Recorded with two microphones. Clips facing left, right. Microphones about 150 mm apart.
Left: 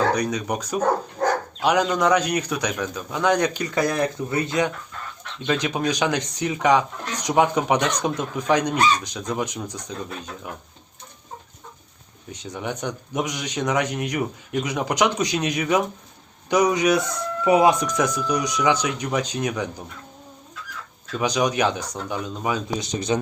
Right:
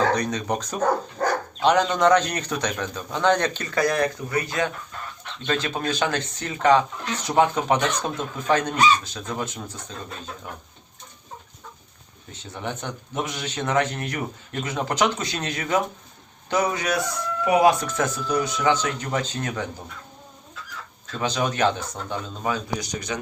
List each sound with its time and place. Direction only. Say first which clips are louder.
0.1 s a man's voice: left 1 dB; 10° left (ahead or behind)
12.3 s a man's voice: left 2 dB; 15° left (ahead or behind)
21.2 s a man's voice: left 2 dB; 15° left (ahead or behind)